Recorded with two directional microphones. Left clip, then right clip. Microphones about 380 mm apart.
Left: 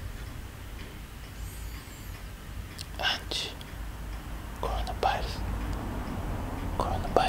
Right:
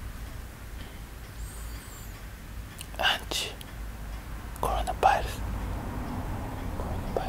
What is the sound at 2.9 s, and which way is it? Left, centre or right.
Whispering, centre.